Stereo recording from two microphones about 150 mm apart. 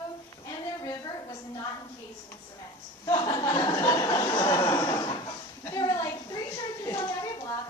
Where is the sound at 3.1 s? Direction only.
25° left (ahead or behind).